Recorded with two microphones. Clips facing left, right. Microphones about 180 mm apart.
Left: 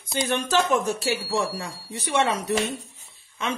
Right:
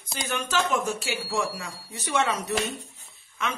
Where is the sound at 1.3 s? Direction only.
35° left (ahead or behind).